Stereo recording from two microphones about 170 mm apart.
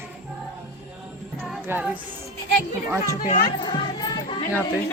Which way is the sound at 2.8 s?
15° right (ahead or behind).